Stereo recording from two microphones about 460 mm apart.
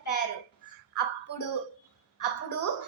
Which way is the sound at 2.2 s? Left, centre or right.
Left.